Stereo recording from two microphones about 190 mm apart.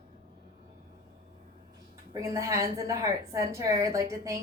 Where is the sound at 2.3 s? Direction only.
15° right (ahead or behind).